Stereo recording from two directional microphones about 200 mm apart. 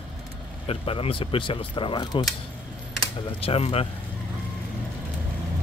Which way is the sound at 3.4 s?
30° left (ahead or behind).